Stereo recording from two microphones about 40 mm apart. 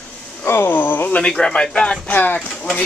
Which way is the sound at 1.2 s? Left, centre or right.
Centre.